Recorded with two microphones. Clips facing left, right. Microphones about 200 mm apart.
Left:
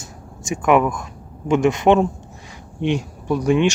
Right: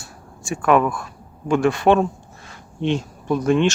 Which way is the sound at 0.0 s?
20° left (ahead or behind).